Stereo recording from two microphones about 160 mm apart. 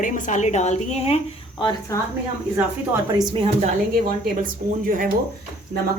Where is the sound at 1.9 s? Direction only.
20° left (ahead or behind).